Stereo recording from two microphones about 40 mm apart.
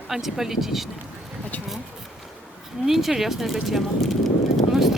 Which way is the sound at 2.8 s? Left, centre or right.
Centre.